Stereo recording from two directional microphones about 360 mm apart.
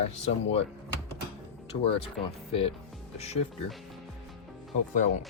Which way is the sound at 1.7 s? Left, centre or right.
Centre.